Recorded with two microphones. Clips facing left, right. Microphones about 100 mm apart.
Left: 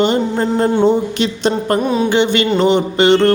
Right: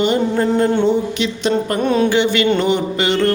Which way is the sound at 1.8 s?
5° left (ahead or behind).